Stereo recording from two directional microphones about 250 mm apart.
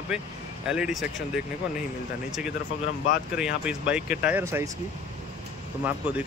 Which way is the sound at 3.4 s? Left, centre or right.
Centre.